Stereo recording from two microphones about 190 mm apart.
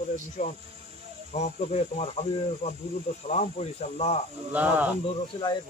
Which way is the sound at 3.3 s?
35° left (ahead or behind).